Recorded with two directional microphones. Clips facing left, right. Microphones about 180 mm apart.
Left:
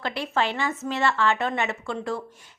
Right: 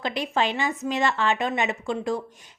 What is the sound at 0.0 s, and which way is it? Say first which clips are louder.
A woman's voice: right 1 dB; 15° right (ahead or behind).